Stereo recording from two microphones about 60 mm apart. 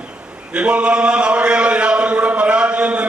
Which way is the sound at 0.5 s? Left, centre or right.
Centre.